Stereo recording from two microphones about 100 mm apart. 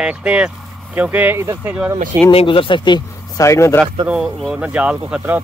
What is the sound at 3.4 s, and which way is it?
Speech, 30° left (ahead or behind).